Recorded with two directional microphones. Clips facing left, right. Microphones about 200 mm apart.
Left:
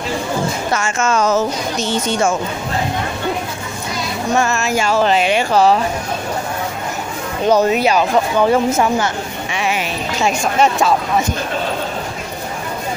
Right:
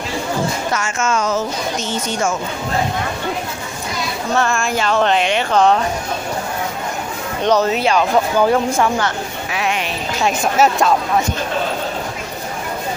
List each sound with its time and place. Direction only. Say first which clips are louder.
0.7 s speech: left 4 dB; 35° left (ahead or behind)
4.3 s speech: left 1 dB; 10° left (ahead or behind)
7.4 s speech: left 2 dB; 10° left (ahead or behind)
8.7 s speech: left 1 dB; 15° left (ahead or behind)
9.5 s speech: left 1 dB; centre (ahead or behind)